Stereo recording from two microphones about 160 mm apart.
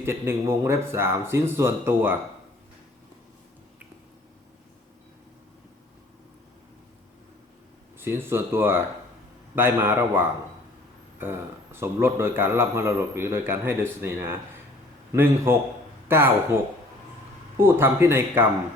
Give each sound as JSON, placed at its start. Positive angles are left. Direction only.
{"t": 0.0, "sound": "a man's voice", "side_deg": -15}
{"t": 7.9, "sound": "a man's voice", "side_deg": -15}
{"t": 17.6, "sound": "a man's voice", "side_deg": -15}